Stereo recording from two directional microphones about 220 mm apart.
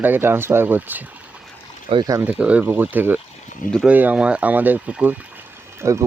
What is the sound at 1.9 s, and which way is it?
Speech, 20° right (ahead or behind).